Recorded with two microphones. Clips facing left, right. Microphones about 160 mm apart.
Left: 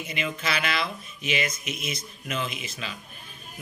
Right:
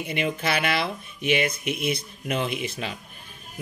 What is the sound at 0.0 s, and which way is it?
A woman's voice, 60° right (ahead or behind).